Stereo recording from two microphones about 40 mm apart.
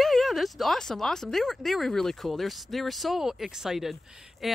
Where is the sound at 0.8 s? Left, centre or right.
Centre.